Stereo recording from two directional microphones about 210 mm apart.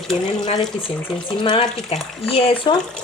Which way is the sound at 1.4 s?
25° left (ahead or behind).